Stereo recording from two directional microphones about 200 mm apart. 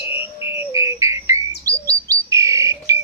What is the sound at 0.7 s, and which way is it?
Bird, 15° right (ahead or behind).